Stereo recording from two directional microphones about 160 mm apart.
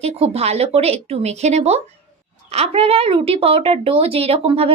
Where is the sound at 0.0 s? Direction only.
40° right (ahead or behind).